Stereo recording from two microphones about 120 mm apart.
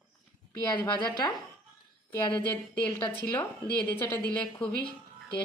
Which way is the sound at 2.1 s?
15° left (ahead or behind).